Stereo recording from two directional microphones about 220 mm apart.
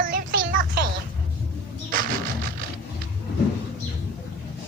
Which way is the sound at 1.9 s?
40° right (ahead or behind).